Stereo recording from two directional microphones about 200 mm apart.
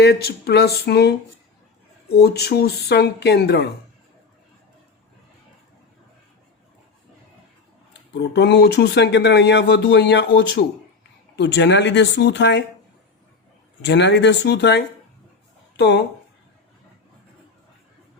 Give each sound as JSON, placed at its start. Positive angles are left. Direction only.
{"t": 0.0, "sound": "speech", "side_deg": 55}
{"t": 8.1, "sound": "speech", "side_deg": 60}
{"t": 13.8, "sound": "speech", "side_deg": 60}